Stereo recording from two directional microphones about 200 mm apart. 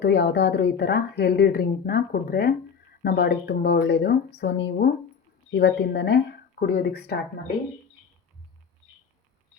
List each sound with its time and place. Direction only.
0.0 s a woman's voice: 60° left (ahead or behind)